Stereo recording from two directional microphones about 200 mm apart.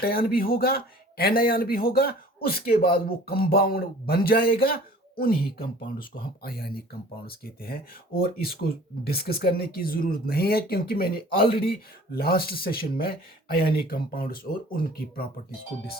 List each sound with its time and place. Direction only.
0.0 s speech: 50° left (ahead or behind)